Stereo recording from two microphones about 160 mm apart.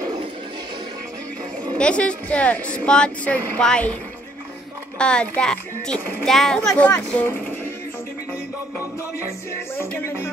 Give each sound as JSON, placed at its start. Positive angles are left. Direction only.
{"t": 1.8, "sound": "speech", "side_deg": 5}
{"t": 4.9, "sound": "a child's voice", "side_deg": 5}
{"t": 9.5, "sound": "speech", "side_deg": 15}